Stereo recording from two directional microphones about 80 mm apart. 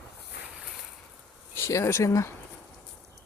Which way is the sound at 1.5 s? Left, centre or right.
Left.